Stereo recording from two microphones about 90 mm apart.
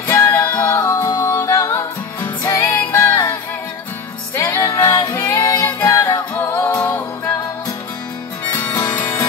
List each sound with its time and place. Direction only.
0.1 s music: 30° left (ahead or behind)
4.4 s music: 30° left (ahead or behind)
5.6 s music: 20° left (ahead or behind)
5.9 s music: 35° left (ahead or behind)